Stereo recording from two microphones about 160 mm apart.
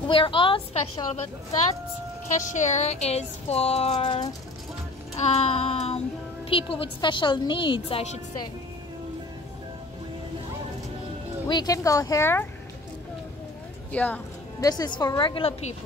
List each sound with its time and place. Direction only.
0.1 s a woman's voice: 30° left (ahead or behind)
2.2 s speech: 50° left (ahead or behind)
5.2 s a sound: 40° left (ahead or behind)
6.5 s a woman's voice: 35° left (ahead or behind)
11.4 s a woman's voice: 25° left (ahead or behind)
13.9 s speech: 10° left (ahead or behind)
14.6 s a woman's voice: 25° left (ahead or behind)